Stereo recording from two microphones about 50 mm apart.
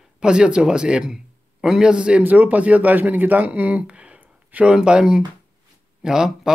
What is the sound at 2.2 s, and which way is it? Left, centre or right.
A man's voice, right.